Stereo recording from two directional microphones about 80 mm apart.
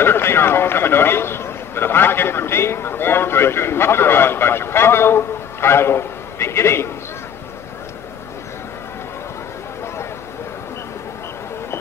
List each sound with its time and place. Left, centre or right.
0.0 s a man's voice: left